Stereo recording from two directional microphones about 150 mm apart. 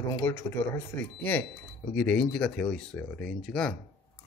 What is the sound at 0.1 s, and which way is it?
Speech, 20° left (ahead or behind).